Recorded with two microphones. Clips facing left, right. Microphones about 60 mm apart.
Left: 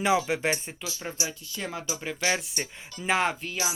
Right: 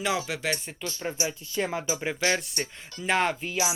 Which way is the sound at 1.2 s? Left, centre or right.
Right.